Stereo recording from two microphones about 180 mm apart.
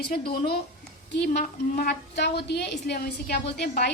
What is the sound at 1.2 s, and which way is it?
A woman's voice, 60° left (ahead or behind).